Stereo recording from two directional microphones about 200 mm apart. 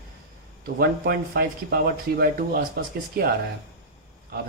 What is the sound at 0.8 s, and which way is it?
Speech, 50° right (ahead or behind).